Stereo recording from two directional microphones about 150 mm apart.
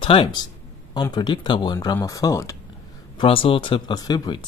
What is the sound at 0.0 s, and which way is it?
Speech, 35° left (ahead or behind).